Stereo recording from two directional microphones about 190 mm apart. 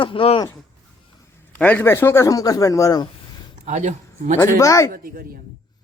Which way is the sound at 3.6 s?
40° right (ahead or behind).